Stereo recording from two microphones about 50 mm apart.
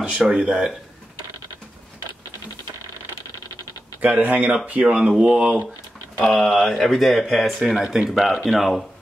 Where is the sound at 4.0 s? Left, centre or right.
Right.